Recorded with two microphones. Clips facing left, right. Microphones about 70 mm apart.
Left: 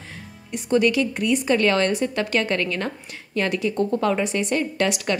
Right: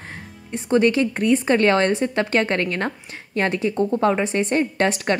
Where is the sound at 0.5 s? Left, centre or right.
Right.